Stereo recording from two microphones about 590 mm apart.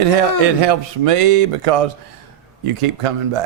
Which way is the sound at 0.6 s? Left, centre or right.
Right.